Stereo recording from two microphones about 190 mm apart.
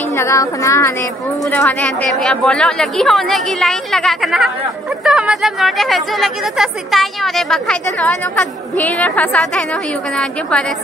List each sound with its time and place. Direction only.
0.1 s speech: 15° left (ahead or behind)
1.4 s speech: 5° left (ahead or behind)